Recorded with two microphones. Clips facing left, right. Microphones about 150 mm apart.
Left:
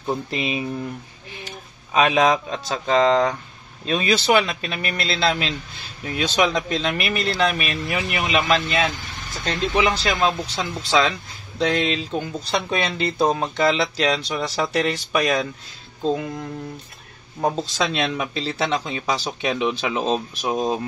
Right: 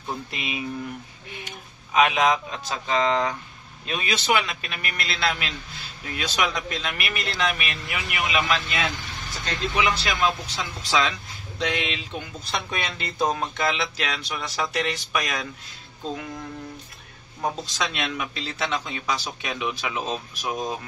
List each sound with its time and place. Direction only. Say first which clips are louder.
0.3 s speech: left 7 dB; 30° left (ahead or behind)
2.0 s speech: left 3 dB; 35° left (ahead or behind)
17.4 s speech: left 5 dB; 35° left (ahead or behind)